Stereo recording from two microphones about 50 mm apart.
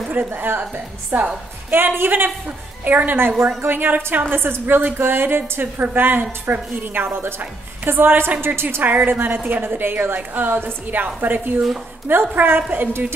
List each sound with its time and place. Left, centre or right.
0.1 s a woman's voice: right
1.7 s a woman's voice: right
4.4 s a woman's voice: right